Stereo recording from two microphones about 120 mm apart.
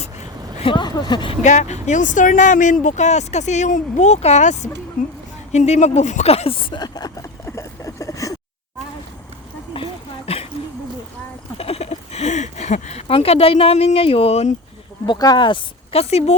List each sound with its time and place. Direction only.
0.0 s a sound: 65° left (ahead or behind)
0.7 s speech: 40° left (ahead or behind)
1.4 s speech: 75° left (ahead or behind); by 7.3 s 35° left (ahead or behind)
7.4 s vehicle: 25° left (ahead or behind)
9.7 s a sound: 50° left (ahead or behind)
11.5 s speech: 55° left (ahead or behind)
15.0 s speech: 35° left (ahead or behind); by 16.3 s 60° left (ahead or behind)